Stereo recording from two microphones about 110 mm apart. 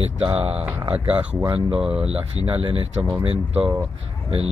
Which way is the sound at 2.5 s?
55° right (ahead or behind).